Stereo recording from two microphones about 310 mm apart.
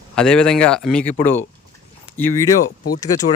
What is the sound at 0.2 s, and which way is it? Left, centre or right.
Speech, centre.